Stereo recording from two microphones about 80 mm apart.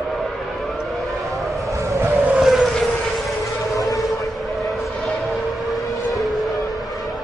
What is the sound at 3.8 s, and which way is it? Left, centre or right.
Vehicle, left.